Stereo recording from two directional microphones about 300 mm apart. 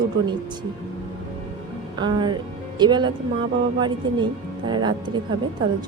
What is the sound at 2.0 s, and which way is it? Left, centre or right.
A woman's voice, centre.